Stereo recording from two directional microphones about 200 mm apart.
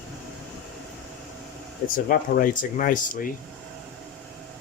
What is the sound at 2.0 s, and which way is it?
Speech, 45° left (ahead or behind).